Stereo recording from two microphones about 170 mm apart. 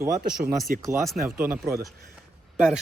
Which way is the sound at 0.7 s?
55° right (ahead or behind).